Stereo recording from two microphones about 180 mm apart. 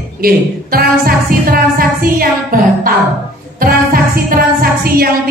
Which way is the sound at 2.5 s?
50° right (ahead or behind).